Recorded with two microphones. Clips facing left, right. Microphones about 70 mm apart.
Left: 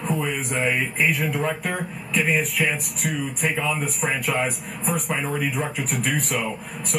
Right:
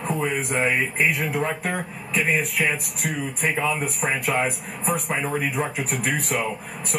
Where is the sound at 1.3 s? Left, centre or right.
Right.